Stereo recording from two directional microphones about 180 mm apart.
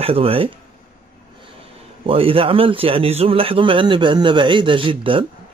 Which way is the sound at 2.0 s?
30° right (ahead or behind).